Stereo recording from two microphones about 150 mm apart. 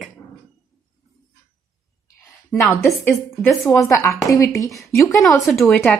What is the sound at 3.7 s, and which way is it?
A woman's voice, 20° left (ahead or behind).